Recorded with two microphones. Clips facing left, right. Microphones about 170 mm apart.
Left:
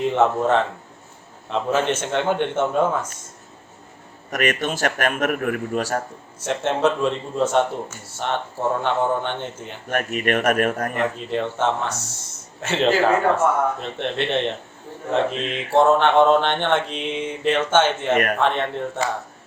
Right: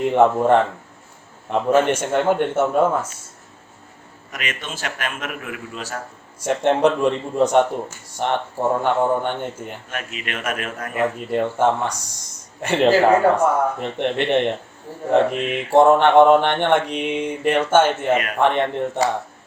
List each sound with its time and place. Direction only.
0.1 s mantra: 15° right (ahead or behind)
4.3 s a man's voice: 50° left (ahead or behind)
6.4 s mantra: 15° right (ahead or behind)
9.9 s a man's voice: 55° left (ahead or behind)
10.9 s mantra: 10° right (ahead or behind)